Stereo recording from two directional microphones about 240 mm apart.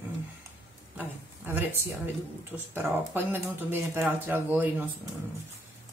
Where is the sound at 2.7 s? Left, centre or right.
Centre.